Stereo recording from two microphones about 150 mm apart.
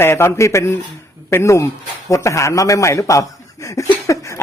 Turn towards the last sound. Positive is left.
turn(degrees=20)  # may be behind; listen again after turning